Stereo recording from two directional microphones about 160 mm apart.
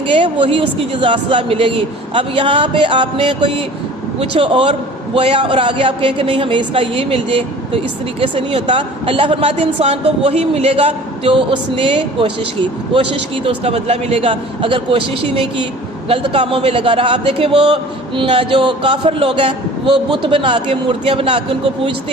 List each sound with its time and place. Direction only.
0.1 s a woman's voice: 30° right (ahead or behind)
13.4 s a woman's voice: 40° right (ahead or behind)